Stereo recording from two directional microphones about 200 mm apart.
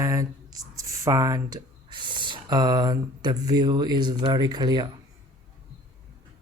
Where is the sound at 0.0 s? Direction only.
15° right (ahead or behind).